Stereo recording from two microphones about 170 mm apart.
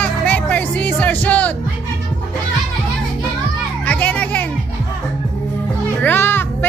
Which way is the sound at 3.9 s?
10° left (ahead or behind).